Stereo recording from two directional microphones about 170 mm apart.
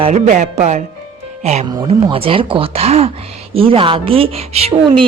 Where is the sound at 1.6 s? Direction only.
20° right (ahead or behind).